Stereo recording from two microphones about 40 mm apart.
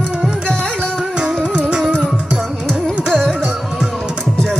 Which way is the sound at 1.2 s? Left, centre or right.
Right.